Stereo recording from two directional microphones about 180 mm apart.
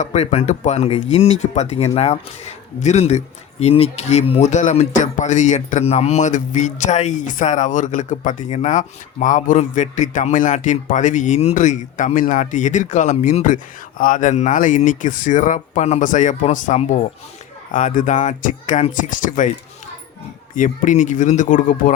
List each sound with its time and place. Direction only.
0.0 s speech: 40° left (ahead or behind)
20.6 s speech: 45° left (ahead or behind)